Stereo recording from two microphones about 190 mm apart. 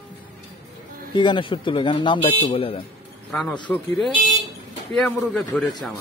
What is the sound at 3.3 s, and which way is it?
Speech, 5° left (ahead or behind).